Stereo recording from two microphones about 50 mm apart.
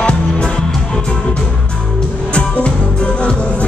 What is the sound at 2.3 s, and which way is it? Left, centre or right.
Music, left.